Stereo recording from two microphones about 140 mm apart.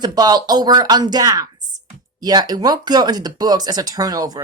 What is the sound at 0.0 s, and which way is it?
Speech, 30° right (ahead or behind).